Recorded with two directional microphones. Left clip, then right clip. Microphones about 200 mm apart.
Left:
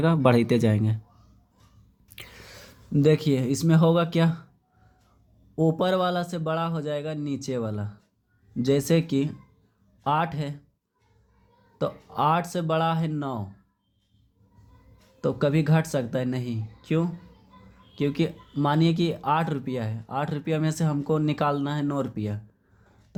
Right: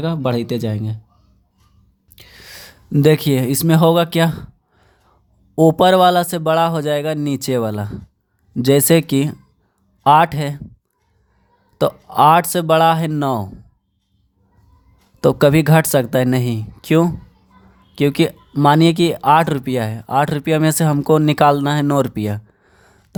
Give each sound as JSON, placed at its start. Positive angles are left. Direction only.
{"t": 0.0, "sound": "speech", "side_deg": -10}
{"t": 2.1, "sound": "gasp", "side_deg": -15}
{"t": 2.5, "sound": "a sound", "side_deg": -30}
{"t": 2.9, "sound": "speech", "side_deg": -30}
{"t": 11.8, "sound": "speech", "side_deg": -35}
{"t": 15.2, "sound": "speech", "side_deg": -40}